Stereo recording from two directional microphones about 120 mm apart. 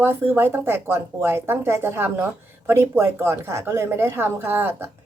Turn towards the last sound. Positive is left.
turn(degrees=-15)  # may be behind; listen again after turning